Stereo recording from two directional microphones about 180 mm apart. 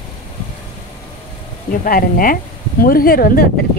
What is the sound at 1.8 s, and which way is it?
A woman's voice, 50° left (ahead or behind).